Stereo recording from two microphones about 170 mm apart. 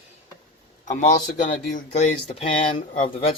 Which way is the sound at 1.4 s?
50° left (ahead or behind).